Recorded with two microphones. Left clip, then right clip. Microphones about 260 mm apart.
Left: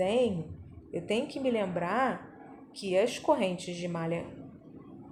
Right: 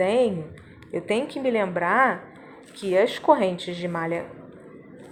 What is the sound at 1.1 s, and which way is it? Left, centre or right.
A woman's voice, centre.